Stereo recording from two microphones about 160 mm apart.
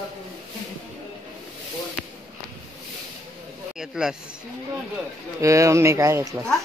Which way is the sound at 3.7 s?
5° right (ahead or behind).